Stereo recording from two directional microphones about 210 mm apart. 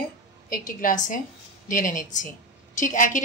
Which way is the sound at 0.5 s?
40° left (ahead or behind).